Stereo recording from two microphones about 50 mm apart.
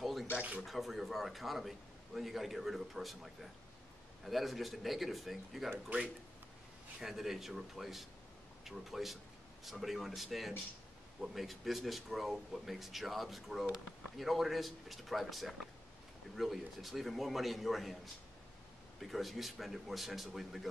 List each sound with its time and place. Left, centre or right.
0.0 s a sound: centre
0.3 s speech: right
0.7 s speech: centre
7.0 s speech: centre
18.9 s speech: centre